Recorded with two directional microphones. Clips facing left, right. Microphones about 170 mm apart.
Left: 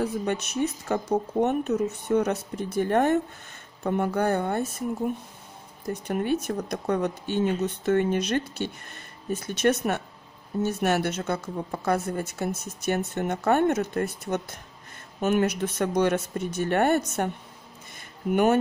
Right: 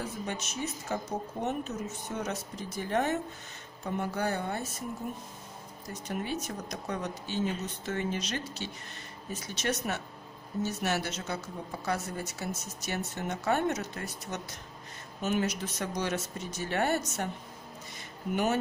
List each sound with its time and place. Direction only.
0.0 s a woman's voice: 60° left (ahead or behind)
6.0 s a woman's voice: 55° left (ahead or behind)
18.3 s a woman's voice: 55° left (ahead or behind)